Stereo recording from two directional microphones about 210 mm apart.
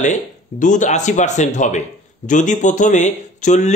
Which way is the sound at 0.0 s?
35° left (ahead or behind).